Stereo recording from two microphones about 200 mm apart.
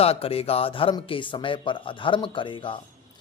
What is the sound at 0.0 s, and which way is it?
Speech, 30° left (ahead or behind).